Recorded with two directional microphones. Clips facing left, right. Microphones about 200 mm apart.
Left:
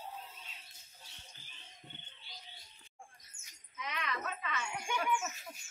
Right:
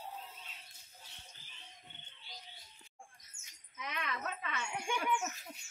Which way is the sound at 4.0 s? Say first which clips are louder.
Left 1 dB; 55° right (ahead or behind).